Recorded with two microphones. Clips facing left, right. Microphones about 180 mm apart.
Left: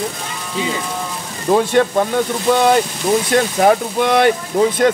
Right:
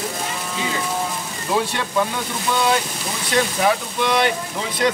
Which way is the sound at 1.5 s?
50° left (ahead or behind).